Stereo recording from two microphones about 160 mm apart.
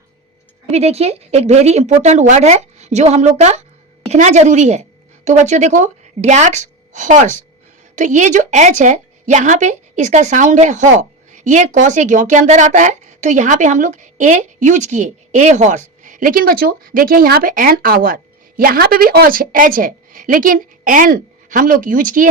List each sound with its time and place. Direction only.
0.7 s a woman's voice: 40° right (ahead or behind); by 22.3 s 55° right (ahead or behind)